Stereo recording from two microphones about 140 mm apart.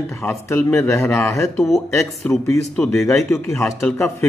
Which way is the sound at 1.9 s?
20° left (ahead or behind).